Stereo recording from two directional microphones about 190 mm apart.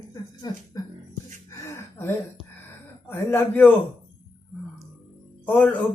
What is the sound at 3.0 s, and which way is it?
Speech, 10° left (ahead or behind).